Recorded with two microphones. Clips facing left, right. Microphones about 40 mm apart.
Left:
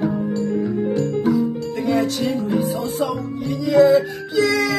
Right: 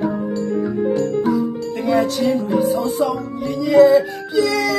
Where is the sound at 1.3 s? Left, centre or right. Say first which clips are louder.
Even; centre.